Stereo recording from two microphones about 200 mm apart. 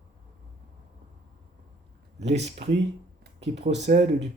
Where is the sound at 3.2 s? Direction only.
60° right (ahead or behind).